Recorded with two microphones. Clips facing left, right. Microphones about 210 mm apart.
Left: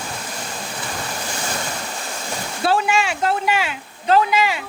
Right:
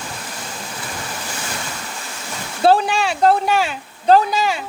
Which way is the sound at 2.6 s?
35° right (ahead or behind).